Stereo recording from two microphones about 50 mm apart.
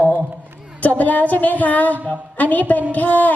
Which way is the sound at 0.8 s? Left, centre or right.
Left.